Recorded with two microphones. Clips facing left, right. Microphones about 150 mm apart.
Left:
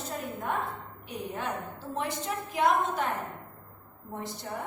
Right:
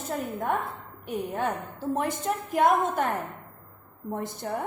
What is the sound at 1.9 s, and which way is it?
A woman's voice, 50° right (ahead or behind).